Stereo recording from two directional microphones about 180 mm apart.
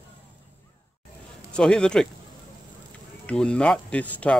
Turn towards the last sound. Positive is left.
turn(degrees=5)  # may be behind; listen again after turning